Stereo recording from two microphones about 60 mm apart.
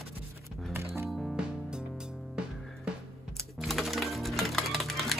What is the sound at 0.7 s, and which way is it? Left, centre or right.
Music, right.